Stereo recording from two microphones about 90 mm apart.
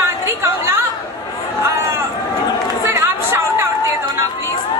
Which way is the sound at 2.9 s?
30° right (ahead or behind).